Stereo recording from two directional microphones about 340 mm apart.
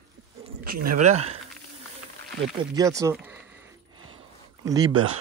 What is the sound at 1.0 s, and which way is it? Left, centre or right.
Speech, centre.